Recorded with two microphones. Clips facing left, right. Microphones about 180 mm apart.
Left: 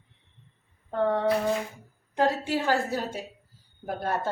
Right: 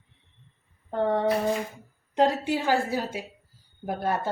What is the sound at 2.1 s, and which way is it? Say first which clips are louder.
Cutlery: right 2 dB; 15° right (ahead or behind).